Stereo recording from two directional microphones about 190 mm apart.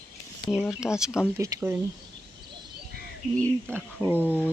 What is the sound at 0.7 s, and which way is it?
Speech, 5° right (ahead or behind).